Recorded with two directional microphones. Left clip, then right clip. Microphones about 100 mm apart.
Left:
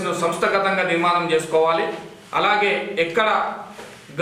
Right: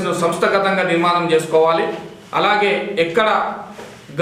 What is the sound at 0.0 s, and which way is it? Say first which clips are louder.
A man's voice: right 4 dB; 10° right (ahead or behind).